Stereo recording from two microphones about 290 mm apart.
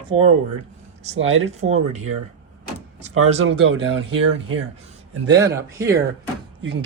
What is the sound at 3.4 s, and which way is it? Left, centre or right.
Speech, right.